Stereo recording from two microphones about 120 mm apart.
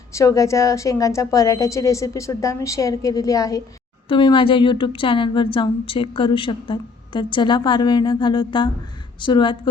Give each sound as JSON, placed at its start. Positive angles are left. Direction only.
{"t": 0.1, "sound": "a woman's voice", "side_deg": 25}